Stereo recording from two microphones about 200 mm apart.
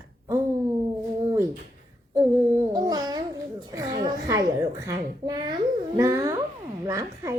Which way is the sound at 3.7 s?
20° right (ahead or behind).